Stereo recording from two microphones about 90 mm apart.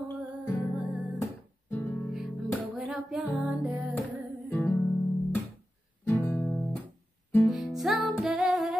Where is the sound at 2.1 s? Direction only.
5° right (ahead or behind).